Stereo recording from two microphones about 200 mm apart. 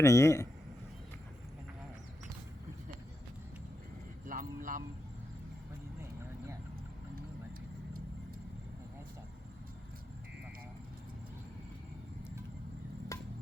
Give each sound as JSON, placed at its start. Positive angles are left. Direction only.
{"t": 0.0, "sound": "a man's voice", "side_deg": 15}
{"t": 4.3, "sound": "a sound", "side_deg": -40}
{"t": 13.1, "sound": "music", "side_deg": 15}